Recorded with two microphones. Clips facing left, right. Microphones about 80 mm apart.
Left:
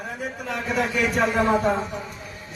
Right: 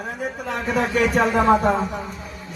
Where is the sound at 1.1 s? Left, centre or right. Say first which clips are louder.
Right 4 dB; right.